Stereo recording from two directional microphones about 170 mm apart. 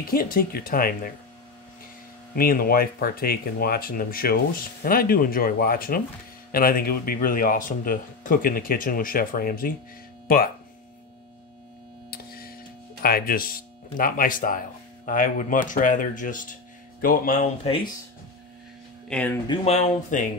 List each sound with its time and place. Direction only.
0.1 s speech: 60° left (ahead or behind)
2.3 s speech: 60° left (ahead or behind)
12.1 s a sound: 65° left (ahead or behind)
13.0 s speech: 60° left (ahead or behind)
19.0 s speech: 10° left (ahead or behind)
19.6 s speech: 40° left (ahead or behind)